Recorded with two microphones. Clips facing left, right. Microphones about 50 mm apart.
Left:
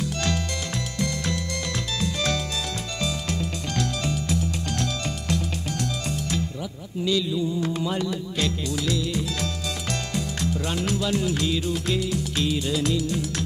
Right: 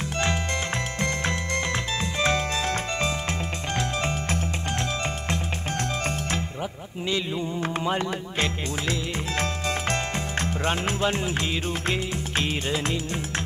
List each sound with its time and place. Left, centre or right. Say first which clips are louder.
1.0 s music: right 1 dB; right
7.1 s music: left 3 dB; right